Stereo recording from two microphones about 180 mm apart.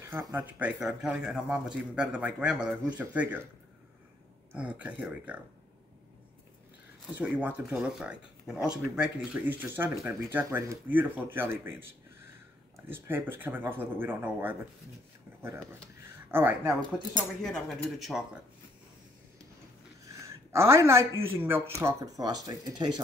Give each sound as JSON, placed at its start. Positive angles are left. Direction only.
{"t": 0.0, "sound": "speech", "side_deg": -15}
{"t": 4.5, "sound": "speech", "side_deg": -10}
{"t": 7.2, "sound": "speech", "side_deg": -10}
{"t": 12.9, "sound": "speech", "side_deg": -10}
{"t": 16.3, "sound": "speech", "side_deg": -10}
{"t": 17.4, "sound": "speech", "side_deg": 0}
{"t": 20.1, "sound": "a sound", "side_deg": -15}
{"t": 21.2, "sound": "speech", "side_deg": -10}